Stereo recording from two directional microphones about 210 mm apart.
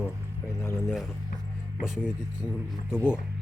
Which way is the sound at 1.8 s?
5° right (ahead or behind).